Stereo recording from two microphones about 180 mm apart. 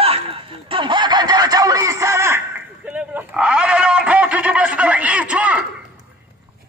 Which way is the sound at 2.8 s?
5° right (ahead or behind).